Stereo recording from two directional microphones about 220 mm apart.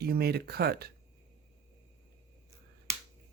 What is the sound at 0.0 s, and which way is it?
Speech, 45° right (ahead or behind).